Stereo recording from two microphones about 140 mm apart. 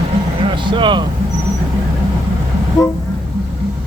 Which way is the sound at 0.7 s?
35° right (ahead or behind).